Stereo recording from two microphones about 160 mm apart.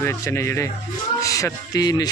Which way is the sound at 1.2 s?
20° left (ahead or behind).